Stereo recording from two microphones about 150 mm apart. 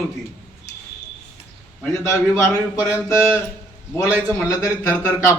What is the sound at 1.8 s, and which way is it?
A man's voice, 15° left (ahead or behind).